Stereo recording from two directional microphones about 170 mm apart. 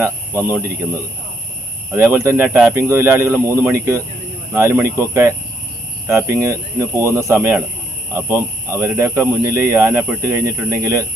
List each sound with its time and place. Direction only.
0.0 s speech: 15° right (ahead or behind)
1.9 s speech: 15° right (ahead or behind)